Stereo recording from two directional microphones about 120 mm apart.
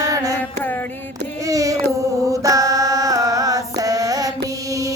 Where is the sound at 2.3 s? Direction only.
30° right (ahead or behind).